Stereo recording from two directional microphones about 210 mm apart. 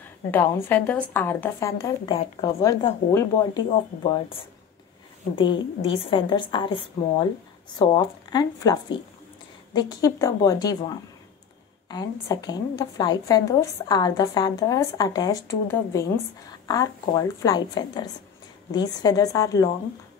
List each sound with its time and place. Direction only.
0.3 s a woman's voice: 10° left (ahead or behind)
7.8 s a woman's voice: 20° left (ahead or behind)
11.9 s a woman's voice: 20° left (ahead or behind)